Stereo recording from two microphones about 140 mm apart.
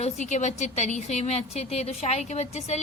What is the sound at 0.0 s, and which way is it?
A woman's voice, 55° left (ahead or behind).